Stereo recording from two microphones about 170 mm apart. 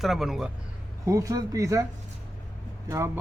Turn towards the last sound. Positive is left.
turn(degrees=-15)  # may be behind; listen again after turning